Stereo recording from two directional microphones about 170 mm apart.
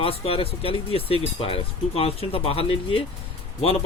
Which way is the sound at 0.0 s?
35° left (ahead or behind).